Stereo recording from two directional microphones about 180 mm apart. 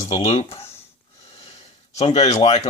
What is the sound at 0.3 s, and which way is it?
Speech, 35° left (ahead or behind).